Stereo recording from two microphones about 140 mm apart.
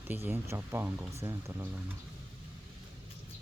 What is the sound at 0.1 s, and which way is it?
Speech, 15° right (ahead or behind).